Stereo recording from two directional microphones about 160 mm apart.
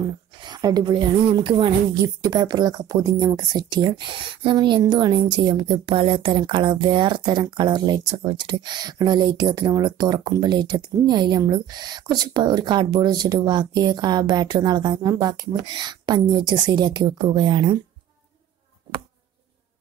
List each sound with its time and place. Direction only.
0.4 s speech: 25° right (ahead or behind)